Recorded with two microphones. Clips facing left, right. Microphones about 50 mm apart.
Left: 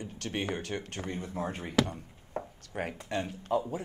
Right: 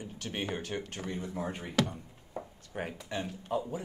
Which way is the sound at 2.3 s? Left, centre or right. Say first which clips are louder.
Left 4 dB; left.